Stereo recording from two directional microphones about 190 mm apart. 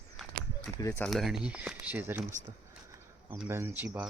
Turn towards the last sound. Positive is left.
turn(degrees=-10)  # may be behind; listen again after turning